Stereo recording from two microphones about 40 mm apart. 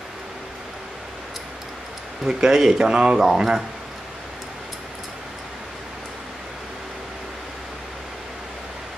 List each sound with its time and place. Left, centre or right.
2.2 s speech: centre